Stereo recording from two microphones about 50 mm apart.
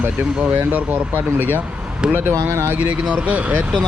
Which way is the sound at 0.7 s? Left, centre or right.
Right.